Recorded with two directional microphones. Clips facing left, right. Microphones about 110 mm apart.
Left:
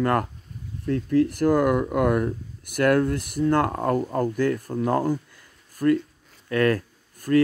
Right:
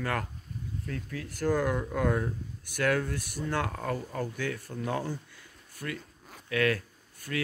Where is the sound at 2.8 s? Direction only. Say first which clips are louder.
Left 8 dB; 55° left (ahead or behind).